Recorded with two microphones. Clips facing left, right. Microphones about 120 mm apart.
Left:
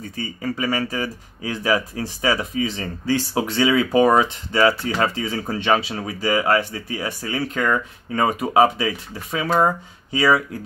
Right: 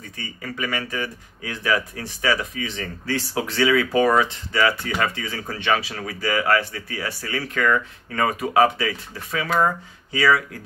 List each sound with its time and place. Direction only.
0.1 s speech: 30° left (ahead or behind)